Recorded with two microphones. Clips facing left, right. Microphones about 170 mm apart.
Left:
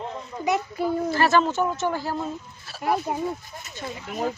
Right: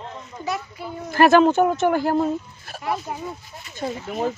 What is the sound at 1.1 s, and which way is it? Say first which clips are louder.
Speech: right 9 dB; 55° right (ahead or behind).